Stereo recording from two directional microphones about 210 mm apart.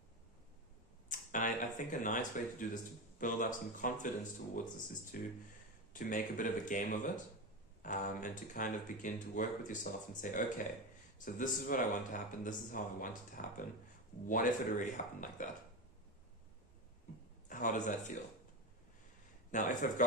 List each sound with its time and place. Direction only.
1.0 s speech: 35° left (ahead or behind)
17.5 s speech: 40° left (ahead or behind)
19.5 s speech: 35° left (ahead or behind)